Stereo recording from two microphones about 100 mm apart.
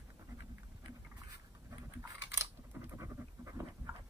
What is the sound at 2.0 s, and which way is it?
Pant, 25° right (ahead or behind).